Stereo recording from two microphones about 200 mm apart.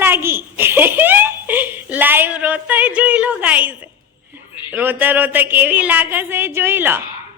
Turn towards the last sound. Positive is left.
turn(degrees=-10)  # may be behind; listen again after turning